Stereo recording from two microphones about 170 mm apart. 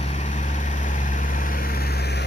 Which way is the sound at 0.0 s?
45° left (ahead or behind).